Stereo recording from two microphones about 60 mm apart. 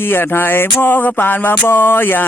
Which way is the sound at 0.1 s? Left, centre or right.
Left.